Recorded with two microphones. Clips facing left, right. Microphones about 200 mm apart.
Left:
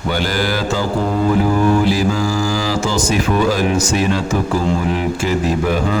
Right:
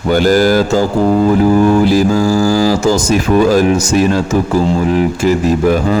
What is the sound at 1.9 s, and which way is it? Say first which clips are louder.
Mantra: right 6 dB; 45° right (ahead or behind).